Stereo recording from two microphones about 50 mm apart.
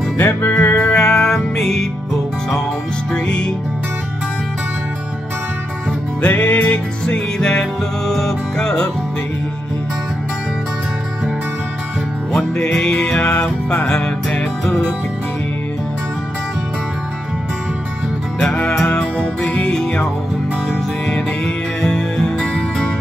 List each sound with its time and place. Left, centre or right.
0.2 s music: left
0.5 s music: left; by 1.9 s centre
3.1 s music: centre
6.3 s music: left
7.3 s music: centre
12.3 s music: centre
18.4 s music: centre
21.8 s music: centre